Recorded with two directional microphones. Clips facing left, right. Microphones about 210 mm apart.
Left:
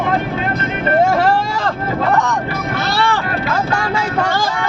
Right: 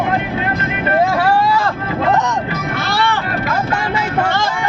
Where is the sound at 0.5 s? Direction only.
30° left (ahead or behind).